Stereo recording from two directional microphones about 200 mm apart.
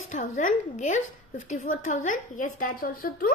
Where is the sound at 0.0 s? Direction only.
40° left (ahead or behind).